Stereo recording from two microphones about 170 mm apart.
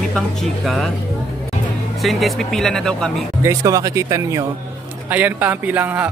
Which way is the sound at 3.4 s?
20° right (ahead or behind).